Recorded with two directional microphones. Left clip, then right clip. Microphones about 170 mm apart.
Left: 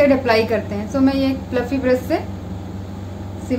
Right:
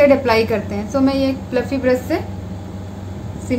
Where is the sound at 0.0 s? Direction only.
10° right (ahead or behind).